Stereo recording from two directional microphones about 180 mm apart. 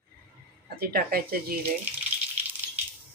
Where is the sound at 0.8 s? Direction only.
55° right (ahead or behind).